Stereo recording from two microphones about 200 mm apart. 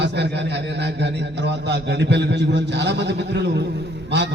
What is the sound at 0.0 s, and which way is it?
A man's voice, 60° right (ahead or behind).